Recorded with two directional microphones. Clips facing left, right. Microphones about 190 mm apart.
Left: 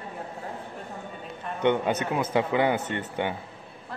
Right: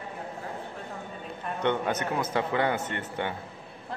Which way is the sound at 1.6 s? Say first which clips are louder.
Left 4 dB; 15° left (ahead or behind).